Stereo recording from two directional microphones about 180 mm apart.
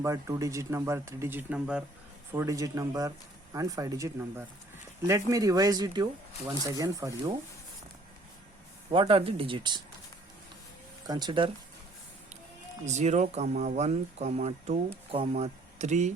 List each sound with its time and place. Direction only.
0.0 s speech: 15° right (ahead or behind)
2.3 s speech: 15° right (ahead or behind)
8.9 s speech: 30° right (ahead or behind)
11.0 s speech: 25° right (ahead or behind)
12.8 s speech: 40° right (ahead or behind)